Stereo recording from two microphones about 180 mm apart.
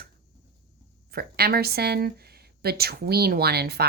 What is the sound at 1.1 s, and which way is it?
Speech, 60° right (ahead or behind).